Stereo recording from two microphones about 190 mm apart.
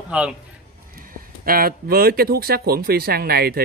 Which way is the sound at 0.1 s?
5° right (ahead or behind).